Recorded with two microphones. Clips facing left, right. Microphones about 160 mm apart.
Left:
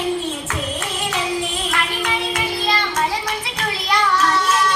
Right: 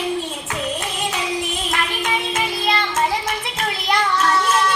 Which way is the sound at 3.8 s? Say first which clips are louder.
Left 1 dB; 25° right (ahead or behind).